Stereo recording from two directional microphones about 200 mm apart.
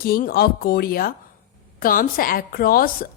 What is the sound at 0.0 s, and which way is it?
A woman's voice, 50° left (ahead or behind).